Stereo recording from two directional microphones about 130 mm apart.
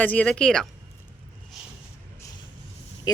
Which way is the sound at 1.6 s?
5° right (ahead or behind).